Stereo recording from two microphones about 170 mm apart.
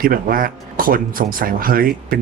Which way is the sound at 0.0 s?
60° right (ahead or behind).